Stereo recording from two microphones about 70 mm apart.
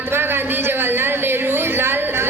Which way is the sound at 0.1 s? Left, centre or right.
Right.